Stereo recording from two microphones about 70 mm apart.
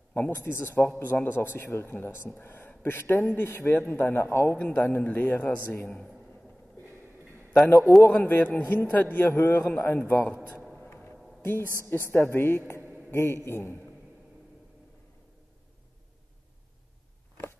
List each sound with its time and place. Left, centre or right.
0.1 s a man's voice: left
8.0 s a man's voice: left
10.8 s music: left
11.6 s a woman's voice: right
11.9 s a man's voice: left